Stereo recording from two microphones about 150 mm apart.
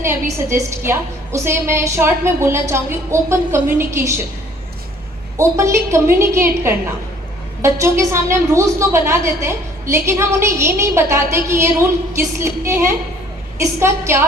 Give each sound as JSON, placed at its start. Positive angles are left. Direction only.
{"t": 0.0, "sound": "a woman's voice", "side_deg": -15}
{"t": 5.4, "sound": "a woman's voice", "side_deg": -20}